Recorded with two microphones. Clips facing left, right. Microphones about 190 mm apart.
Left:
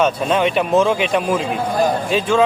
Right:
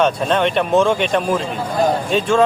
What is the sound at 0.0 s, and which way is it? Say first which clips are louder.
Speech: even; 5° left (ahead or behind).